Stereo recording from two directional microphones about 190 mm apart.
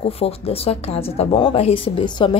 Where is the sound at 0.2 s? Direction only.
30° left (ahead or behind).